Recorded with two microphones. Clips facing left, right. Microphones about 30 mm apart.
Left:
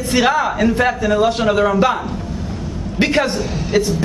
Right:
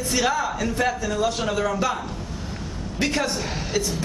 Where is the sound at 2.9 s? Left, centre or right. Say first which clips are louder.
Left 8 dB; left.